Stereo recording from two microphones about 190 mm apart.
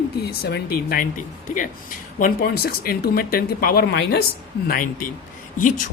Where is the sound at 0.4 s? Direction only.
55° left (ahead or behind).